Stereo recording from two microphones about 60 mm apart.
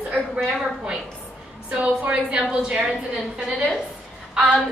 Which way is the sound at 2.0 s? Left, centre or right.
Centre.